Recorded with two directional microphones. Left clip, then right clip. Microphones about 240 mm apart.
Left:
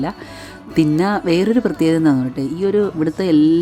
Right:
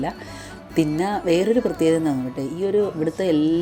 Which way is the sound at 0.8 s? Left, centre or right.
Centre.